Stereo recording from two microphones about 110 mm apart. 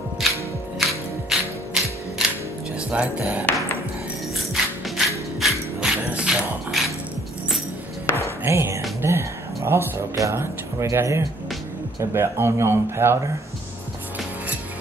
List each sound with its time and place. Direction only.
0.2 s music: centre (ahead or behind)
2.9 s speech: 10° right (ahead or behind)
4.8 s music: centre (ahead or behind)
8.5 s speech: 25° right (ahead or behind)